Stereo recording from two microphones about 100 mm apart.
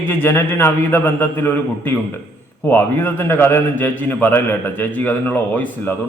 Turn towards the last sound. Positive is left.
turn(degrees=20)  # may be behind; listen again after turning